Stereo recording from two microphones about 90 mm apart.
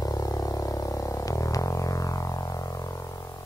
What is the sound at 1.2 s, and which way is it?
Music, 40° left (ahead or behind).